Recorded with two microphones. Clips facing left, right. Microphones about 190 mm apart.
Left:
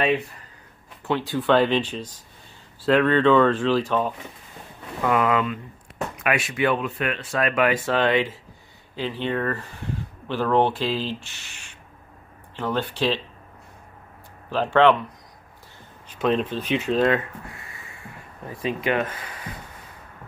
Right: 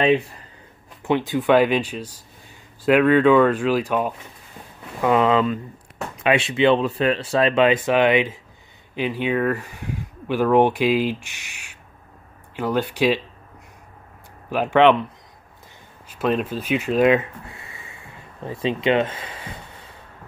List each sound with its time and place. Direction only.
1.0 s speech: 20° right (ahead or behind)
5.0 s speech: 25° right (ahead or behind)
14.5 s speech: 15° right (ahead or behind)
16.1 s speech: 5° right (ahead or behind); by 19.9 s 25° right (ahead or behind)